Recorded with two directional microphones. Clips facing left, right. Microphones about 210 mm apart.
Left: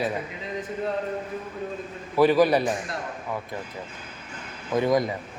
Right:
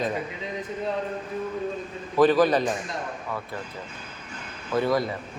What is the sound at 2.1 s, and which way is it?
Speech, 10° left (ahead or behind).